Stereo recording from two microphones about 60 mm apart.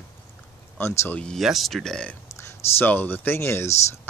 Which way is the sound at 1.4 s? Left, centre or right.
Centre.